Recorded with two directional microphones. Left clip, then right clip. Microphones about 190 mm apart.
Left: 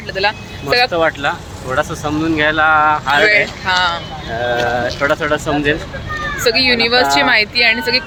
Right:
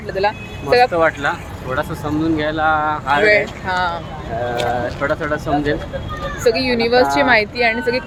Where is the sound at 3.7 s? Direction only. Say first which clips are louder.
Left 4 dB; 15° right (ahead or behind).